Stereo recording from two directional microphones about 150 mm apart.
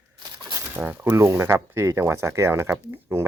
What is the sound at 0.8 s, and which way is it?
Speech, 10° right (ahead or behind).